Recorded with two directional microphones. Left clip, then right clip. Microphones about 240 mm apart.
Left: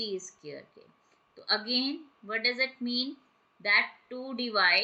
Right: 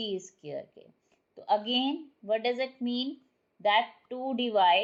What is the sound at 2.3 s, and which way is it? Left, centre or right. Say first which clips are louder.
A woman's voice: even; left.